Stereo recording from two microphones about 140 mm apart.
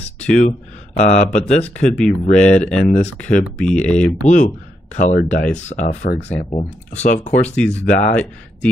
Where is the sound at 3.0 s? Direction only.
10° left (ahead or behind).